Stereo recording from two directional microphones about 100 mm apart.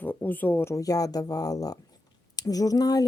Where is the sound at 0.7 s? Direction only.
35° left (ahead or behind).